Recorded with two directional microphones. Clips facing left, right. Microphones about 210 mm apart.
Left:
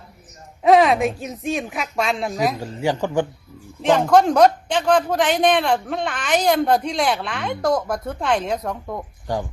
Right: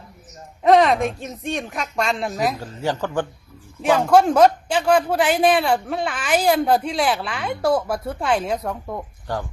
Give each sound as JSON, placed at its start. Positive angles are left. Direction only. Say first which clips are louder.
{"t": 0.6, "sound": "speech", "louder": "left 1 dB", "side_deg": 0}
{"t": 2.6, "sound": "speech", "louder": "left 2 dB", "side_deg": 10}
{"t": 3.8, "sound": "a man's voice", "louder": "even", "side_deg": -10}
{"t": 9.2, "sound": "speech", "louder": "left 3 dB", "side_deg": 15}